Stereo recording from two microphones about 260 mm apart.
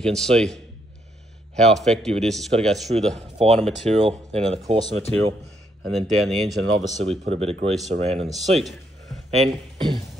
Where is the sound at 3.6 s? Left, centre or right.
Right.